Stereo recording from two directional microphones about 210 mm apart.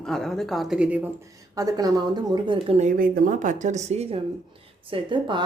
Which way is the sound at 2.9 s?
40° right (ahead or behind).